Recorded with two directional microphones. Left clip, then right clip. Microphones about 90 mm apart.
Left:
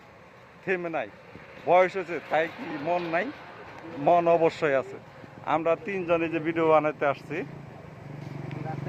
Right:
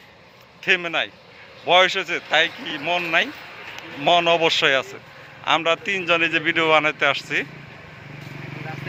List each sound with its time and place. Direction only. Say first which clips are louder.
0.6 s a man's voice: right 9 dB; 35° right (ahead or behind)
3.8 s a man's voice: right 4 dB; 40° right (ahead or behind)